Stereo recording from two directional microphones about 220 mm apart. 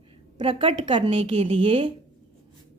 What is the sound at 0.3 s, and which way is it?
A woman's voice, 25° right (ahead or behind).